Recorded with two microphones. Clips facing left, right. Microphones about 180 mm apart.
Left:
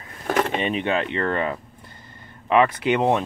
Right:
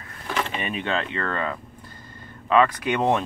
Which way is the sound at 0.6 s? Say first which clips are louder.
Left 4 dB; 25° left (ahead or behind).